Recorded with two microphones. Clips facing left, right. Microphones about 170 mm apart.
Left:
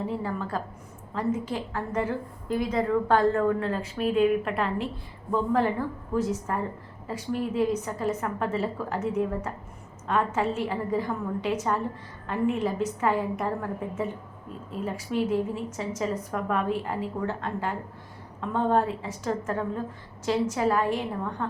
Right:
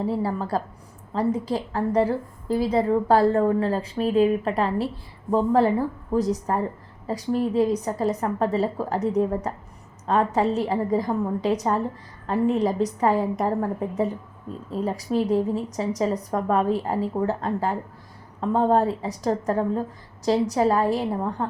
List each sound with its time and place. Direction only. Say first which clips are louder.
0.2 s a woman's voice: right 5 dB; 35° right (ahead or behind)